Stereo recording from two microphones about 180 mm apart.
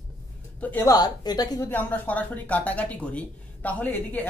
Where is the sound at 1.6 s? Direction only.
10° left (ahead or behind).